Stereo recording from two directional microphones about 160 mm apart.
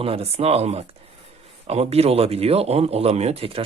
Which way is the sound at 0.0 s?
40° right (ahead or behind).